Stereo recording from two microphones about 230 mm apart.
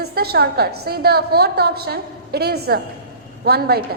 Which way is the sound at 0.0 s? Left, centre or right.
Right.